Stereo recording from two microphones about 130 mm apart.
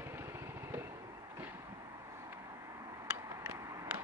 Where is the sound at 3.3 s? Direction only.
25° right (ahead or behind).